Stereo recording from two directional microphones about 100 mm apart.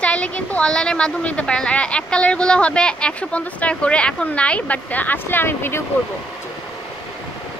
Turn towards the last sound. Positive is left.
turn(degrees=20)  # may be behind; listen again after turning